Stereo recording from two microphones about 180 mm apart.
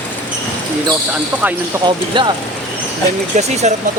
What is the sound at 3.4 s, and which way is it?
Speech, 40° right (ahead or behind).